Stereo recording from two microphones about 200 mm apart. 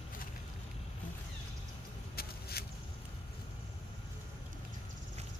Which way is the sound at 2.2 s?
50° left (ahead or behind).